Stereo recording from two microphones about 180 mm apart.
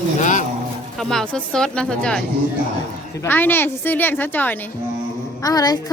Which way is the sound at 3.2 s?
10° left (ahead or behind).